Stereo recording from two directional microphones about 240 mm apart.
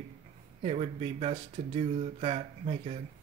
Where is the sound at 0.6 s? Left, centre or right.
Right.